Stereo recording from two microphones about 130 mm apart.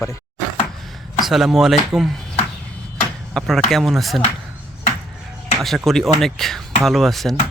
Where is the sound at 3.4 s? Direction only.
Centre (ahead or behind).